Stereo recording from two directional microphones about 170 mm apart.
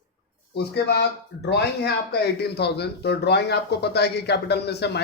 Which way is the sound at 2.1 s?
70° left (ahead or behind).